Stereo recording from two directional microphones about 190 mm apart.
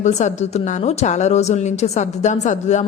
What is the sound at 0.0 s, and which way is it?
A woman's voice, 35° left (ahead or behind).